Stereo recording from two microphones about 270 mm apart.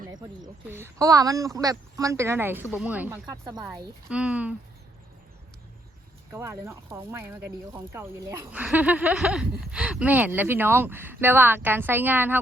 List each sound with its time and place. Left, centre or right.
0.0 s speech: centre
3.6 s speech: centre
6.3 s speech: centre